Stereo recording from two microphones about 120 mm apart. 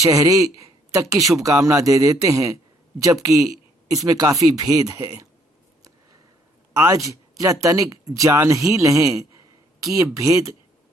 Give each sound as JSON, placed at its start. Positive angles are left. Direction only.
{"t": 0.0, "sound": "speech", "side_deg": -25}
{"t": 6.7, "sound": "speech", "side_deg": -25}